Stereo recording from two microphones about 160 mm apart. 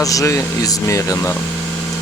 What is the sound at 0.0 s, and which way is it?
Speech, 20° left (ahead or behind).